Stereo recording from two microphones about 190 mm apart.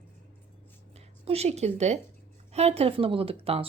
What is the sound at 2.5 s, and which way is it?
A woman's voice, 35° right (ahead or behind).